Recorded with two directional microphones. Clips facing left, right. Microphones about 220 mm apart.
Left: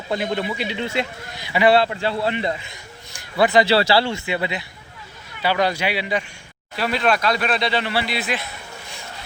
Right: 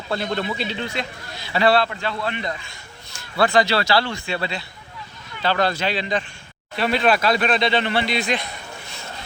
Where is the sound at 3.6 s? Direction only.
30° left (ahead or behind); by 8.5 s 5° left (ahead or behind).